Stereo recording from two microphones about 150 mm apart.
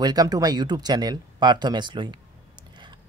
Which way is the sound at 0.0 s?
25° right (ahead or behind).